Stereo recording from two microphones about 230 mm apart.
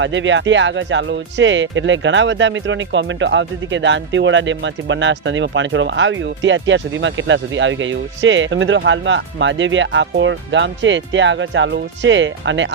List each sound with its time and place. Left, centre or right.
0.0 s speech: right